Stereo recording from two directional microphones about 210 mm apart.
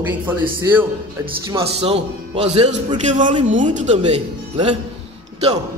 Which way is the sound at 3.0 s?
35° right (ahead or behind).